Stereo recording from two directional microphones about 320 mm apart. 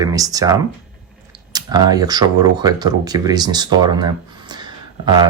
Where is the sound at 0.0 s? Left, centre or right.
Centre.